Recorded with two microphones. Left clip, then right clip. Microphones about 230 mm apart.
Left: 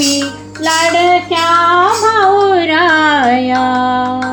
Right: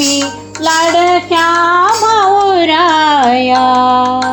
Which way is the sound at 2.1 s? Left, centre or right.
Right.